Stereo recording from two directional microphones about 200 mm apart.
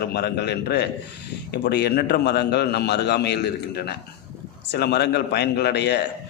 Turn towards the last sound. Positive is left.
turn(degrees=55)  # may be behind; listen again after turning